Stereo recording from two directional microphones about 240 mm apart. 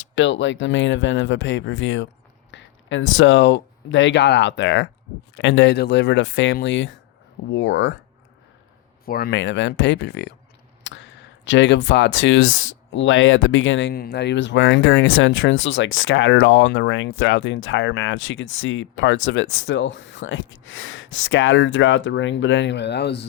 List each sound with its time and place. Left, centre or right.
0.2 s speech: left
9.0 s speech: left